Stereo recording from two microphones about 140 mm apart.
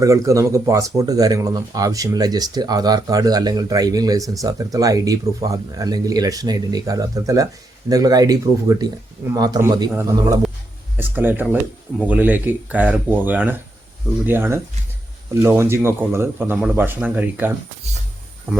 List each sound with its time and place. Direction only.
0.0 s speech: 20° right (ahead or behind)